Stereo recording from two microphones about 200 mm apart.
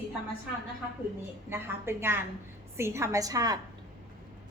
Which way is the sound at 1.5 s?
10° right (ahead or behind).